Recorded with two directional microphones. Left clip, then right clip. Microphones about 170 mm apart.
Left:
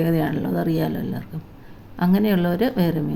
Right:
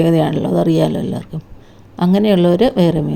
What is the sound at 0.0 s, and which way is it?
A woman's voice, 30° right (ahead or behind).